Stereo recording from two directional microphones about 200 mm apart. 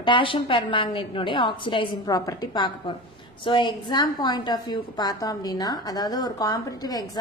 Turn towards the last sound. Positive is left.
turn(degrees=20)  # may be behind; listen again after turning